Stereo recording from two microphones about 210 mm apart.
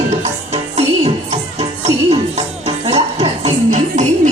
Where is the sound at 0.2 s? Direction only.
30° right (ahead or behind).